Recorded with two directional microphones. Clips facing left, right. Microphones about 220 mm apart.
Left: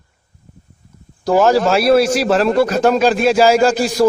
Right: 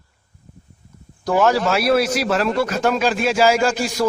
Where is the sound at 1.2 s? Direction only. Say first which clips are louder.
Left 4 dB; 30° left (ahead or behind).